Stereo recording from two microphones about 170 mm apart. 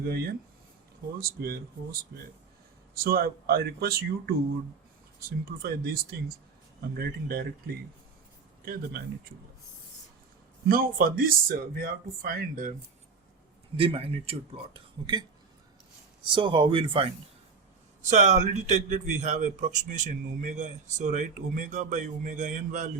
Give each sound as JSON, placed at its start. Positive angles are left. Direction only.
{"t": 0.0, "sound": "speech", "side_deg": -65}
{"t": 5.6, "sound": "speech", "side_deg": -60}
{"t": 10.7, "sound": "speech", "side_deg": -60}
{"t": 13.7, "sound": "speech", "side_deg": -35}
{"t": 16.2, "sound": "speech", "side_deg": -30}
{"t": 18.0, "sound": "a man's voice", "side_deg": -45}